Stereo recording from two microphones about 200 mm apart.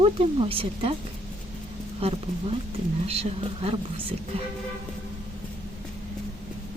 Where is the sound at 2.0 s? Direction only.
30° right (ahead or behind).